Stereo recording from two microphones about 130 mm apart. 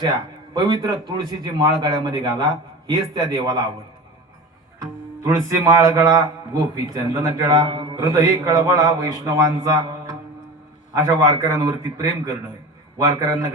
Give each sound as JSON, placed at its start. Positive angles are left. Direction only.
{"t": 0.0, "sound": "a man's voice", "side_deg": -35}
{"t": 5.2, "sound": "a man's voice", "side_deg": -25}
{"t": 10.9, "sound": "a man's voice", "side_deg": -25}